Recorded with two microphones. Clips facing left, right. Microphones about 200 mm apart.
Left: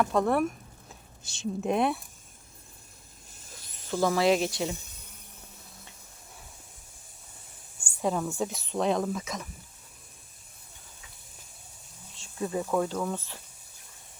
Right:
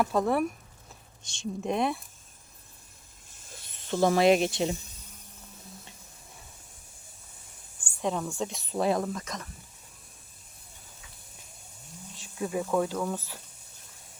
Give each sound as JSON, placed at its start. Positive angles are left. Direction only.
{"t": 0.0, "sound": "speech", "side_deg": -5}
{"t": 3.6, "sound": "speech", "side_deg": -25}
{"t": 8.0, "sound": "speech", "side_deg": 5}
{"t": 12.4, "sound": "speech", "side_deg": -5}